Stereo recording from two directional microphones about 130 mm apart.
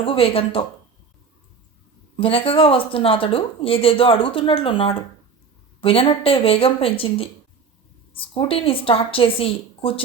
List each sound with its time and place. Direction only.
0.0 s speech: 45° left (ahead or behind)
2.1 s speech: 45° left (ahead or behind)